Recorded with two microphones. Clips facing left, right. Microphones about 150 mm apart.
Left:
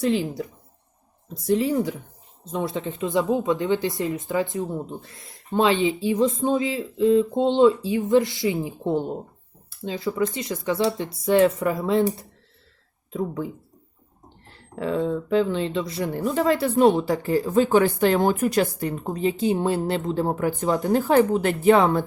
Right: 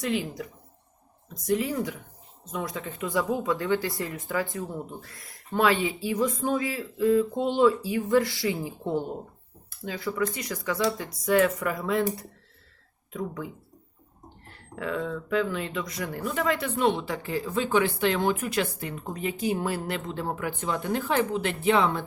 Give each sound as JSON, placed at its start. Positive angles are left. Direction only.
{"t": 0.0, "sound": "speech", "side_deg": 30}
{"t": 13.1, "sound": "speech", "side_deg": 30}
{"t": 14.5, "sound": "speech", "side_deg": 30}